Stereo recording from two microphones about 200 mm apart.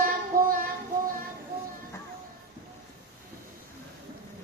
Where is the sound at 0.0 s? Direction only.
45° right (ahead or behind).